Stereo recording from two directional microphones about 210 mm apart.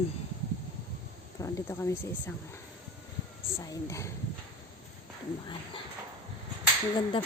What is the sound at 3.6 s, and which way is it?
Speech, 15° left (ahead or behind).